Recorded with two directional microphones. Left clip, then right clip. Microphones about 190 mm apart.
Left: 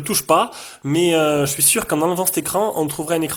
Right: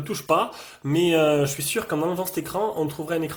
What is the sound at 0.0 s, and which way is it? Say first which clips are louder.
Speech: left 6 dB; 35° left (ahead or behind).